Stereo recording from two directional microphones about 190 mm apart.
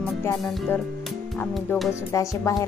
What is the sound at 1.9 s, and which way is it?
Speech, 15° left (ahead or behind).